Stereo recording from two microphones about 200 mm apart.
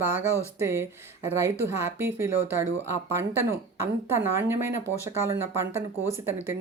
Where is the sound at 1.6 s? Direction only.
10° right (ahead or behind).